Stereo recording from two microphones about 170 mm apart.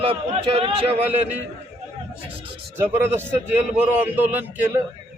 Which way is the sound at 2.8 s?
15° right (ahead or behind).